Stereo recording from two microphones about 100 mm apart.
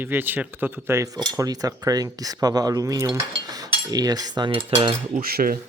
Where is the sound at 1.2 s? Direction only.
40° right (ahead or behind).